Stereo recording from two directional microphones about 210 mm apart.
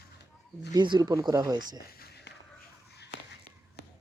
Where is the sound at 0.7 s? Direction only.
20° right (ahead or behind).